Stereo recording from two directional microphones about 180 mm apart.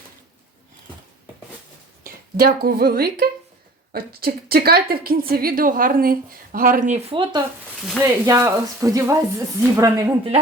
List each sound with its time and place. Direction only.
2.0 s a woman's voice: 55° right (ahead or behind); by 7.4 s 25° right (ahead or behind)
7.8 s speech: centre (ahead or behind)
8.3 s speech: 20° right (ahead or behind)